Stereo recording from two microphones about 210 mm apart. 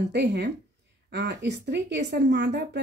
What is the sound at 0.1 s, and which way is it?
Speech, 55° right (ahead or behind).